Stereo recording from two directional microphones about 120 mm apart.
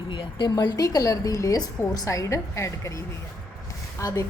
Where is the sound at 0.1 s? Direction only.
45° left (ahead or behind).